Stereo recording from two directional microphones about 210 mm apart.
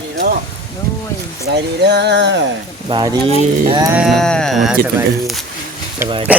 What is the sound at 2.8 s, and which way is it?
Speech, 20° right (ahead or behind).